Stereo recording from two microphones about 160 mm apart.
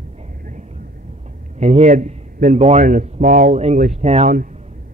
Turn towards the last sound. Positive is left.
turn(degrees=-50)  # may be behind; listen again after turning